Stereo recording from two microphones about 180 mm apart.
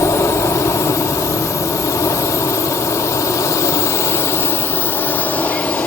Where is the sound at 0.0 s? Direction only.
15° left (ahead or behind).